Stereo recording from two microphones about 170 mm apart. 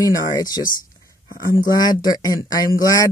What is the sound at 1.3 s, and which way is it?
Speech, 60° left (ahead or behind).